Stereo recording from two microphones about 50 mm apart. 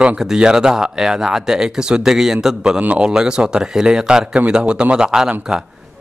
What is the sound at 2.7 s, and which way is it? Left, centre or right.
Speech, right.